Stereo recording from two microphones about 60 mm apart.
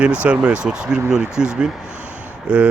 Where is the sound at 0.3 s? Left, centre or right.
Right.